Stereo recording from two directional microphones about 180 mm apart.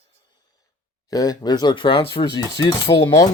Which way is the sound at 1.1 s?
20° left (ahead or behind).